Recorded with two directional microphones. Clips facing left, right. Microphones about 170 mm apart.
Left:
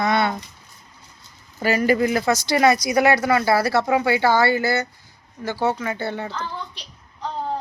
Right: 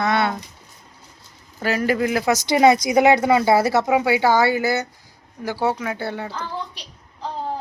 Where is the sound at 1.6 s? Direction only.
Centre (ahead or behind).